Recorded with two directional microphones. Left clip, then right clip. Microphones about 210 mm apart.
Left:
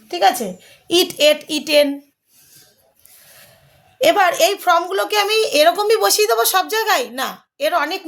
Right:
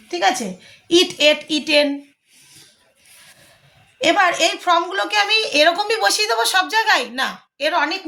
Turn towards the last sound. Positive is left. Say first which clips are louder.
# left 1 dB
turn(degrees=60)  # may be behind; listen again after turning